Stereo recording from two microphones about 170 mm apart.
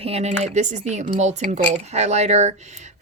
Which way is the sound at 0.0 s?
35° right (ahead or behind).